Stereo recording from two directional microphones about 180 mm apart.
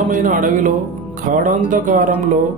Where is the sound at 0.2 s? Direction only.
50° right (ahead or behind).